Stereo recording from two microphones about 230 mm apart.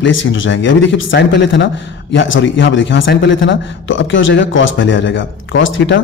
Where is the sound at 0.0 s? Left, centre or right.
Left.